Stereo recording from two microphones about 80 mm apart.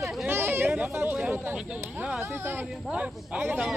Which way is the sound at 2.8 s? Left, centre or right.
Centre.